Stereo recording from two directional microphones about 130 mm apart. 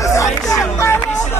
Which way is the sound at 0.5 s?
20° left (ahead or behind).